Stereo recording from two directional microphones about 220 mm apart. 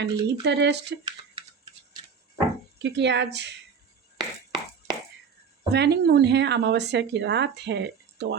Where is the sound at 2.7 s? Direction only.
50° right (ahead or behind).